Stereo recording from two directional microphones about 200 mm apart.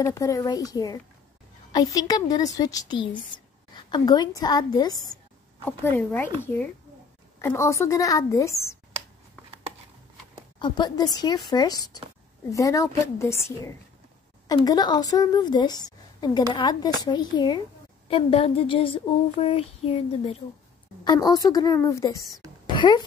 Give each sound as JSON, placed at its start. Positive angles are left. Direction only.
{"t": 0.0, "sound": "a woman's voice", "side_deg": 15}
{"t": 5.7, "sound": "a woman's voice", "side_deg": 10}
{"t": 10.6, "sound": "a woman's voice", "side_deg": 20}
{"t": 21.0, "sound": "a woman's voice", "side_deg": 20}
{"t": 22.7, "sound": "a sound", "side_deg": 20}